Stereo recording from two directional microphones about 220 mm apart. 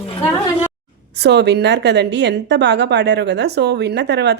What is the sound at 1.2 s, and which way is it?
A woman's voice, 50° right (ahead or behind).